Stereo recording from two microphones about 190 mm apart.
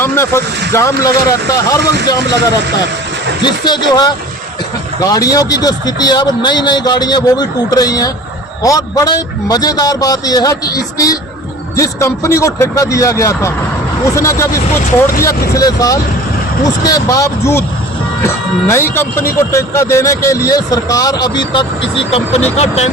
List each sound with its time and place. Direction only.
0.0 s speech: 15° left (ahead or behind)
3.4 s a man's voice: 25° left (ahead or behind)